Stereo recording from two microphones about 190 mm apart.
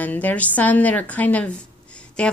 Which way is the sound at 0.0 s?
10° left (ahead or behind).